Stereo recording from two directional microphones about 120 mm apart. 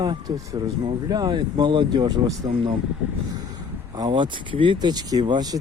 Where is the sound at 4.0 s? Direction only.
40° right (ahead or behind).